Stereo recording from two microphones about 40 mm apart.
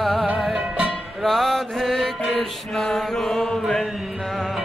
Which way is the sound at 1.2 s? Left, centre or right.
Centre.